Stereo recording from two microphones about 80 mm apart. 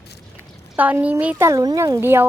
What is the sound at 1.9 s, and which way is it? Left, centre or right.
Speech, right.